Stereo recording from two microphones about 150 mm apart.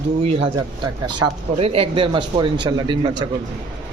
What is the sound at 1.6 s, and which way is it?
A man's voice, 40° right (ahead or behind).